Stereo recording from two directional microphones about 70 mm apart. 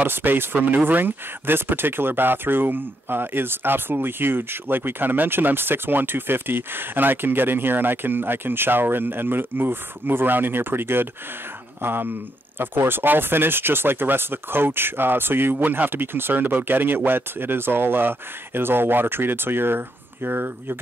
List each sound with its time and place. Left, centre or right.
0.0 s speech: right